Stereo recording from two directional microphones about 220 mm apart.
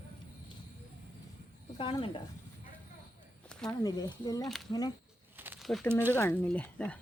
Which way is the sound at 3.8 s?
15° left (ahead or behind).